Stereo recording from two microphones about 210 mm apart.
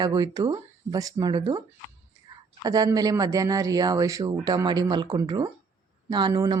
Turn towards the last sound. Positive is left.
turn(degrees=-20)  # may be behind; listen again after turning